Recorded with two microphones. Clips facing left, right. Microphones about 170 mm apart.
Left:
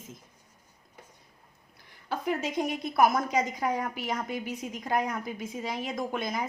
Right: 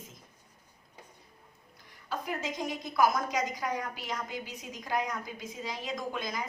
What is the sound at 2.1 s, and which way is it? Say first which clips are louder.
A woman's voice: left 5 dB; 60° left (ahead or behind).